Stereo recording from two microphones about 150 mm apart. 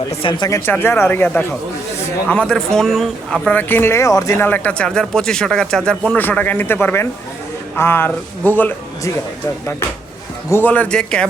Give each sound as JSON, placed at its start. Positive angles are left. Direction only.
{"t": 0.2, "sound": "speech", "side_deg": 30}
{"t": 10.5, "sound": "speech", "side_deg": 10}